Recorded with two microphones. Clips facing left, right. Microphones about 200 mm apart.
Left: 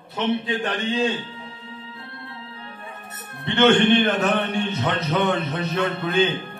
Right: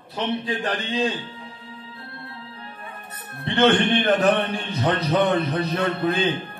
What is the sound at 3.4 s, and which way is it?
A man's voice, 30° right (ahead or behind).